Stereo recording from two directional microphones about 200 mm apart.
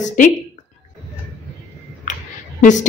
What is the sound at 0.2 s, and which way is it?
Speech, 40° left (ahead or behind).